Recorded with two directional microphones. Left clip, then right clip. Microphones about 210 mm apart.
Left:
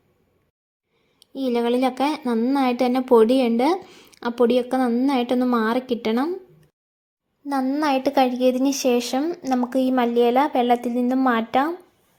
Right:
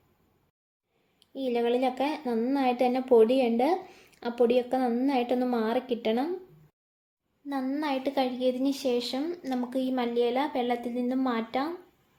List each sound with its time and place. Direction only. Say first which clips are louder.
1.2 s a woman's voice: left 5 dB; 35° left (ahead or behind)
7.5 s a woman's voice: left 9 dB; 35° left (ahead or behind)